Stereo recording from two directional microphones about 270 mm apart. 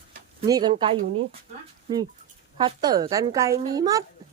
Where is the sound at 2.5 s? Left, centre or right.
Centre.